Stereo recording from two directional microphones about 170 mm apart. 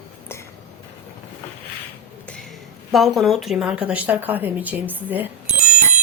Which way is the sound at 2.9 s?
Centre (ahead or behind).